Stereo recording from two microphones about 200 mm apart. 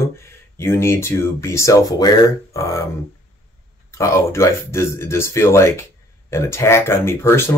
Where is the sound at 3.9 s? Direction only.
15° left (ahead or behind).